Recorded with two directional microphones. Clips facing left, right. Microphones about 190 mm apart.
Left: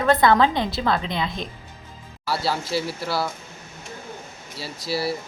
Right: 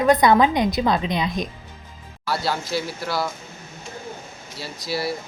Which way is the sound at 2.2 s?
5° left (ahead or behind).